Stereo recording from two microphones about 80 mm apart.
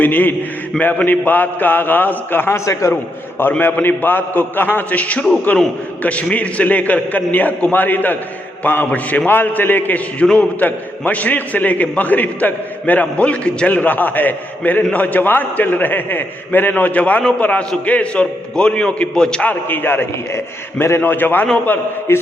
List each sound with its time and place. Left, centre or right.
0.0 s a man's voice: left
22.1 s mantra: left